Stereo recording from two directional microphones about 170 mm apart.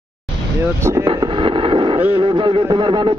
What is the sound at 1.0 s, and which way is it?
Radio, 30° right (ahead or behind).